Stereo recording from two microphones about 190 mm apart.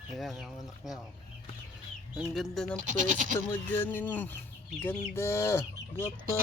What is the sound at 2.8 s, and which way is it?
Speech, 40° right (ahead or behind).